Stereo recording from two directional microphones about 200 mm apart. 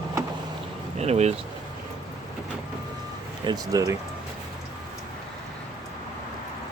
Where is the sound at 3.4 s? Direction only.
20° right (ahead or behind).